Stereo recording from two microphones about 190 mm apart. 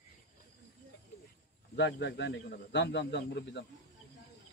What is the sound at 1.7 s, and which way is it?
Speech, 65° left (ahead or behind).